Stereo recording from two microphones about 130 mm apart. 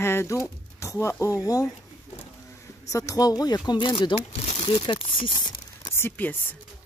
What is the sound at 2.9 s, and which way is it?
Speech, 25° left (ahead or behind).